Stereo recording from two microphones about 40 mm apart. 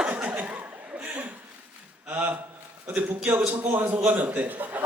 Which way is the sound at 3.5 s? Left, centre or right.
Right.